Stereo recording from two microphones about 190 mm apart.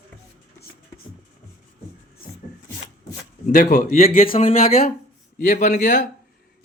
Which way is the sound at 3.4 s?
45° left (ahead or behind).